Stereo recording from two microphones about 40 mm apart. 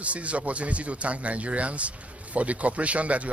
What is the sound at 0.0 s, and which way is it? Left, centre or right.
Speech, right.